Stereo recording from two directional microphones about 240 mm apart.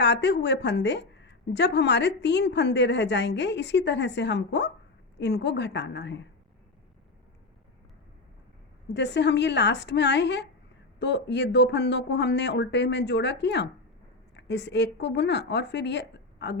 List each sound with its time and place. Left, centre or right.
0.0 s a woman's voice: left
8.9 s a woman's voice: left